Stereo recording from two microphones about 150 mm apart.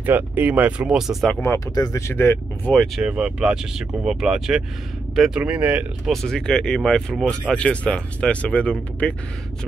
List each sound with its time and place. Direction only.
0.0 s speech: 10° right (ahead or behind)
1.4 s speech: 20° left (ahead or behind)
2.7 s speech: 5° left (ahead or behind)
3.1 s speech: 5° right (ahead or behind)
6.2 s speech: 5° left (ahead or behind)